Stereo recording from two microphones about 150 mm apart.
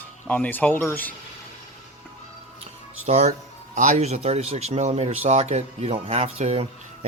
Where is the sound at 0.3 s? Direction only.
10° left (ahead or behind).